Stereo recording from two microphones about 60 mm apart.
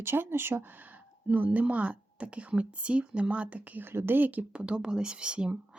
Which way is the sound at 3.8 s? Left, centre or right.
Right.